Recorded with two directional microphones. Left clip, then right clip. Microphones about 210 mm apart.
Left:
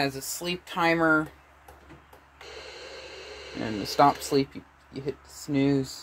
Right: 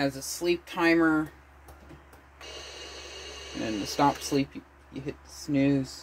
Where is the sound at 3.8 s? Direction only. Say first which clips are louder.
Left 5 dB; 30° left (ahead or behind).